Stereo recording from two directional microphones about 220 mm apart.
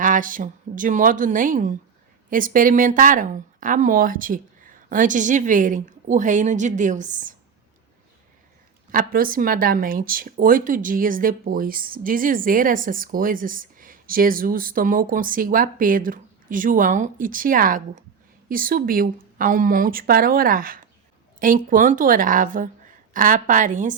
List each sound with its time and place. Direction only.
0.0 s speech: 35° right (ahead or behind)
8.9 s speech: 40° right (ahead or behind)